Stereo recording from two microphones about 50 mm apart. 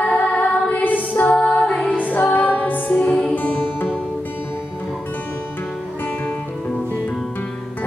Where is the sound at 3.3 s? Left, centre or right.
Left.